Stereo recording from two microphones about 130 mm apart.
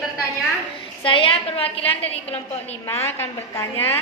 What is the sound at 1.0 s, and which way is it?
A woman's voice, 45° left (ahead or behind).